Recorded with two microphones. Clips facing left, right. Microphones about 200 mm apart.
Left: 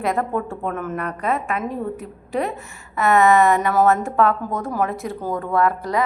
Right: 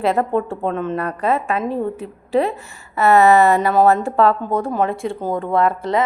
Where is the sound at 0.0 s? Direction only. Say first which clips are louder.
Right 4 dB; 30° right (ahead or behind).